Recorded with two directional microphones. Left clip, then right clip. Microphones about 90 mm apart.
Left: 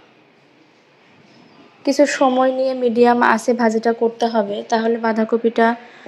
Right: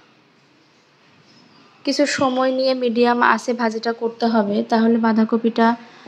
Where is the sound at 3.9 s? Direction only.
30° left (ahead or behind).